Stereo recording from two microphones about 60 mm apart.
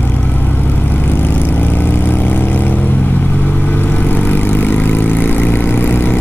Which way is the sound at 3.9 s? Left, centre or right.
Left.